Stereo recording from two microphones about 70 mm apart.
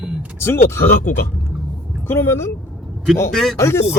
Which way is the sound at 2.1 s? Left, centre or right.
Left.